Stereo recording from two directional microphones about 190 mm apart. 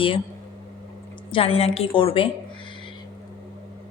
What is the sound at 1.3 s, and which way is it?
Speech, 30° left (ahead or behind).